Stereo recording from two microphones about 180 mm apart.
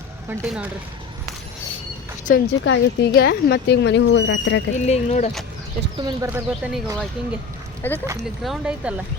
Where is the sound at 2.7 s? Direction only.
65° left (ahead or behind); by 4.6 s 90° left.